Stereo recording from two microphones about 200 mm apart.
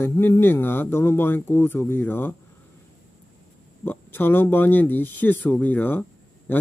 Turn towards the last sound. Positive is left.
turn(degrees=10)  # may be behind; listen again after turning